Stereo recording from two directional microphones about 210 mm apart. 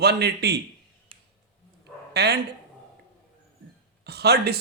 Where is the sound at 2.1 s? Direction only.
50° right (ahead or behind).